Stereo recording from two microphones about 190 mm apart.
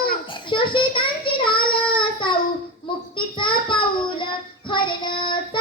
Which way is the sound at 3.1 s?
25° left (ahead or behind).